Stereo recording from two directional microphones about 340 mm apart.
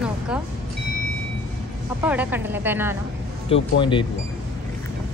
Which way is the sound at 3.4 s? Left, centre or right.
Centre.